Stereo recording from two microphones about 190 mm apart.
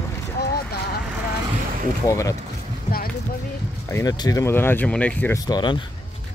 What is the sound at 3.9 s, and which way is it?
Speech, 20° left (ahead or behind).